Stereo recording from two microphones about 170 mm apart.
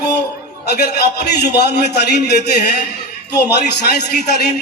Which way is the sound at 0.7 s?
75° left (ahead or behind).